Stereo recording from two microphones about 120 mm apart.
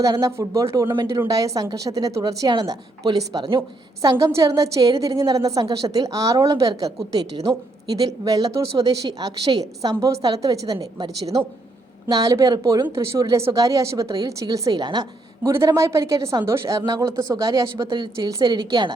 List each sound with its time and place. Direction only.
0.0 s a woman's voice: 30° right (ahead or behind)
17.8 s speech: 40° right (ahead or behind)